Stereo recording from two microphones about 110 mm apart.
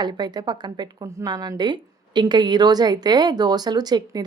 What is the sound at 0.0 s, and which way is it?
A woman's voice, 40° right (ahead or behind).